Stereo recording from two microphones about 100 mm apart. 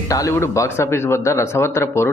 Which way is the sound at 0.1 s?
30° left (ahead or behind).